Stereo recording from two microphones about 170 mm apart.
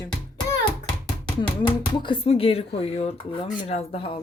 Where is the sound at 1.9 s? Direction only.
30° left (ahead or behind).